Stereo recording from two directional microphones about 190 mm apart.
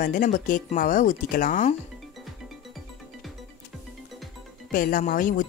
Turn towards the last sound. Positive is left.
turn(degrees=45)  # may be behind; listen again after turning